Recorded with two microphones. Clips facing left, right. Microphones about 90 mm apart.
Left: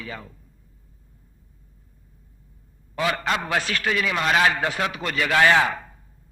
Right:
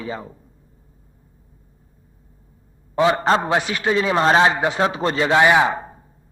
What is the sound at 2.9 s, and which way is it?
A man's voice, 25° right (ahead or behind).